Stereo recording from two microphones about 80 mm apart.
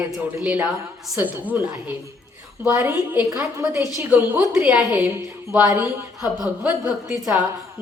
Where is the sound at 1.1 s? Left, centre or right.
Centre.